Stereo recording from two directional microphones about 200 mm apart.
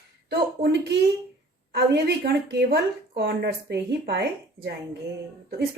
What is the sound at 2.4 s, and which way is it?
Speech, 50° right (ahead or behind).